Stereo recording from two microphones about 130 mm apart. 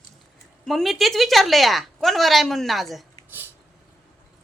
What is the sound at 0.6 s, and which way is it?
A woman's voice, centre (ahead or behind).